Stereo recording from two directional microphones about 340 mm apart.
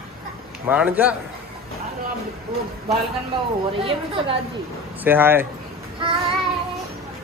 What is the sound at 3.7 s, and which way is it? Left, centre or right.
A woman's voice, centre.